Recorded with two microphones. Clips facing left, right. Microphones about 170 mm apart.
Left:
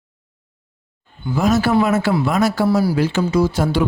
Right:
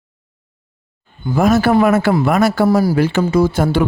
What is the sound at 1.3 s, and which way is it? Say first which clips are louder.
A man's voice: right 3 dB; 55° right (ahead or behind).